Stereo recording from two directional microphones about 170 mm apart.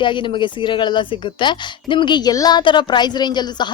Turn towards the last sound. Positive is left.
turn(degrees=25)  # may be behind; listen again after turning